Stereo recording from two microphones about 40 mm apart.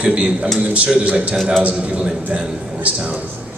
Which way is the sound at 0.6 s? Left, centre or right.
Right.